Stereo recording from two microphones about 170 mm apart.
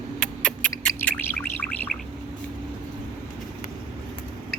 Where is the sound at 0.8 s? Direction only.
10° left (ahead or behind).